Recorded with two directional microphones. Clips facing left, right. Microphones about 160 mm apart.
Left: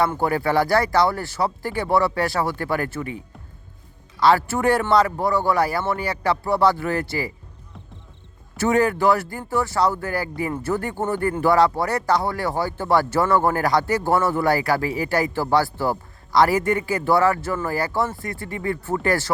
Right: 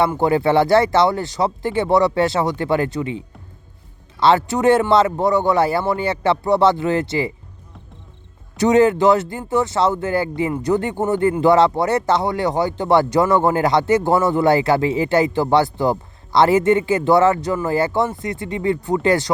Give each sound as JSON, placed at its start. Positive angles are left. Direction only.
{"t": 0.2, "sound": "speech", "side_deg": -25}
{"t": 4.2, "sound": "speech", "side_deg": -25}
{"t": 8.5, "sound": "speech", "side_deg": -20}